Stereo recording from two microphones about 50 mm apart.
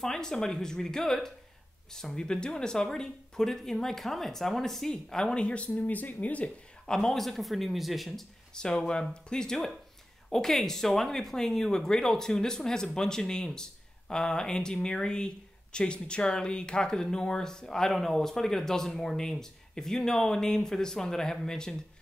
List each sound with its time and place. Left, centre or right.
0.0 s speech: centre; by 6.5 s left
6.9 s speech: centre
8.5 s speech: centre